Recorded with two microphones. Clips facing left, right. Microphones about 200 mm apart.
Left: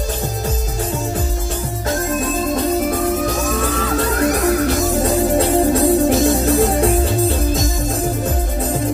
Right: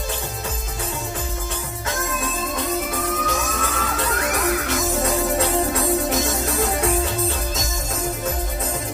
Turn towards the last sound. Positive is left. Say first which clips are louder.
# left 6 dB
turn(degrees=35)  # may be behind; listen again after turning